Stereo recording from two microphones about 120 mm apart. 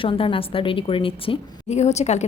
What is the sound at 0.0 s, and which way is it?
A woman's voice, 45° left (ahead or behind).